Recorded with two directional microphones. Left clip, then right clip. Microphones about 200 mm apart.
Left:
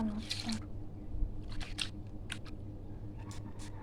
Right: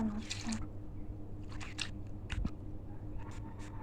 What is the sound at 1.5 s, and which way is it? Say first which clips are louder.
Biting: left 2 dB; 15° left (ahead or behind).